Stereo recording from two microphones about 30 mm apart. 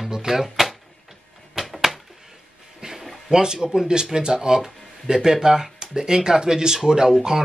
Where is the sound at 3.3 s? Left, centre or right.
Right.